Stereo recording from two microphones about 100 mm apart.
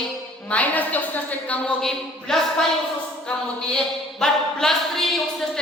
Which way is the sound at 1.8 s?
5° left (ahead or behind).